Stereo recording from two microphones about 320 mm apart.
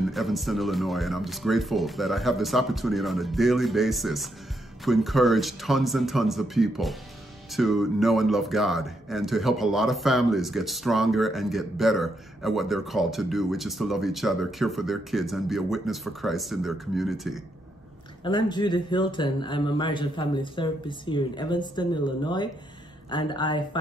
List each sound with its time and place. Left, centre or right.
0.1 s speech: centre
18.2 s speech: centre